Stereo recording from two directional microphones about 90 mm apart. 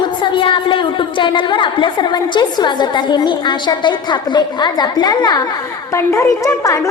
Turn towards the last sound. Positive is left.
turn(degrees=35)  # may be behind; listen again after turning